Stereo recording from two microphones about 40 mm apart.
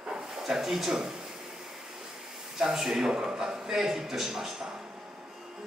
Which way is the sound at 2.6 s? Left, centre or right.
Centre.